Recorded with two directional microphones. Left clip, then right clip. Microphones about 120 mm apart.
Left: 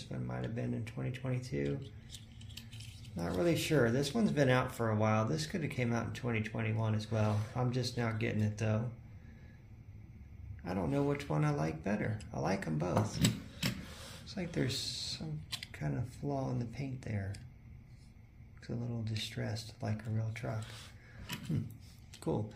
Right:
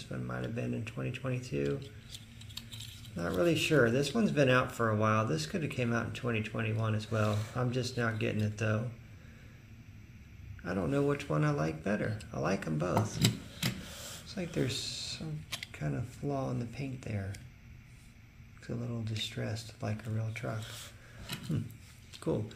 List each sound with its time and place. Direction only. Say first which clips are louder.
0.0 s speech: right 3 dB; 15° right (ahead or behind)
3.3 s speech: right 4 dB; 20° right (ahead or behind)
10.6 s speech: right 3 dB; 20° right (ahead or behind)
18.7 s speech: right 2 dB; 15° right (ahead or behind)